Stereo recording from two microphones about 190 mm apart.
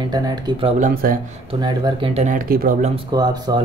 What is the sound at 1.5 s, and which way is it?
Speech, 25° right (ahead or behind).